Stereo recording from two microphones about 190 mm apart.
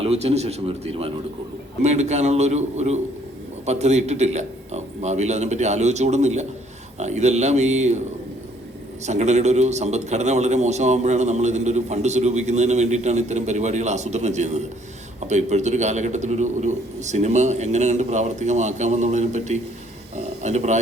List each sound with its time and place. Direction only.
0.0 s a man's voice: 30° right (ahead or behind)
1.8 s a man's voice: 35° right (ahead or behind)
9.0 s a man's voice: 35° right (ahead or behind)